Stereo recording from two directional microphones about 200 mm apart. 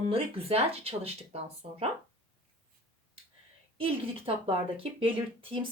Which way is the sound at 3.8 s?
30° right (ahead or behind).